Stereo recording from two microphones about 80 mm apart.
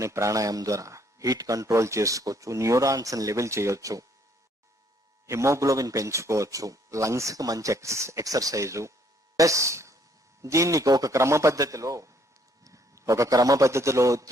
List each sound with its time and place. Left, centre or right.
0.0 s speech: right
5.2 s a man's voice: right